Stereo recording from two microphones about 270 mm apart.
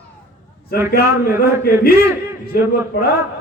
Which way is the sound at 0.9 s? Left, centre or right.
Left.